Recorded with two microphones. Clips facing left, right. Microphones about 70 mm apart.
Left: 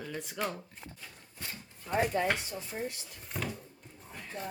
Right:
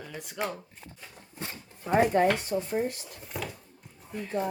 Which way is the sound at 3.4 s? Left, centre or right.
Centre.